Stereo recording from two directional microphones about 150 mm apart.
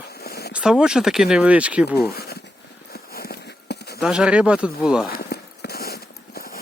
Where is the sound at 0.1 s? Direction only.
90° left.